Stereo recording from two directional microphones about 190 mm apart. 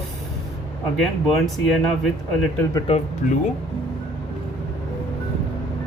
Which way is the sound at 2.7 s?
30° left (ahead or behind).